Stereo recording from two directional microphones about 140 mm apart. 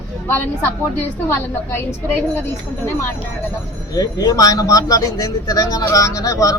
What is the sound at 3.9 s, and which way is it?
Speech, 25° left (ahead or behind).